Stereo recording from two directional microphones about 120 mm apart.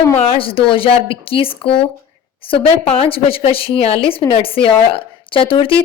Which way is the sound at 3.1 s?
50° left (ahead or behind).